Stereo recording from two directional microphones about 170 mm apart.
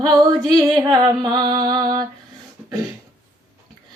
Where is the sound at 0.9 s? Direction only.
25° right (ahead or behind).